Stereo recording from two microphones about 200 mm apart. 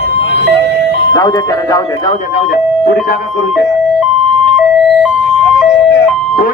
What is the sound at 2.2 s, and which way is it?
Speech, 50° left (ahead or behind).